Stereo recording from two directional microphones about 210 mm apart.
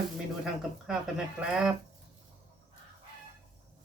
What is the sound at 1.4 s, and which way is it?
Speech, 5° right (ahead or behind).